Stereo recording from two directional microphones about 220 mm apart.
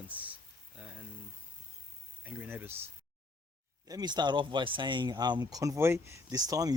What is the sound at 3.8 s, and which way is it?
Speech, 15° right (ahead or behind).